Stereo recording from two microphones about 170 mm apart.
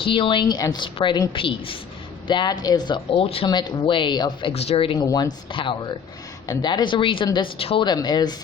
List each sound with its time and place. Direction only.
0.0 s speech: 30° left (ahead or behind)